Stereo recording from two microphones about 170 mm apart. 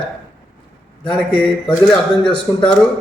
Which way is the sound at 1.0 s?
5° left (ahead or behind).